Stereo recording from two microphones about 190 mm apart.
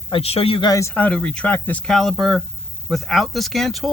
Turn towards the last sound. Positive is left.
turn(degrees=0)  # may be behind; listen again after turning